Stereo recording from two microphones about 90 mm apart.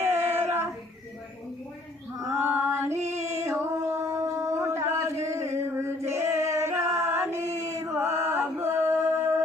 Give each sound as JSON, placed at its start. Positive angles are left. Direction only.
{"t": 0.0, "sound": "child singing", "side_deg": -25}
{"t": 2.4, "sound": "music", "side_deg": -25}